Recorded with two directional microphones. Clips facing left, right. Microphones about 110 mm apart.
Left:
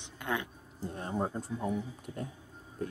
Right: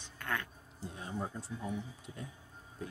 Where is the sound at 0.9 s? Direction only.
50° left (ahead or behind).